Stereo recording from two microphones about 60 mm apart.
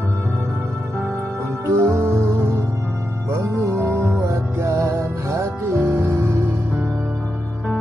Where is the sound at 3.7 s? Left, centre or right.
Right.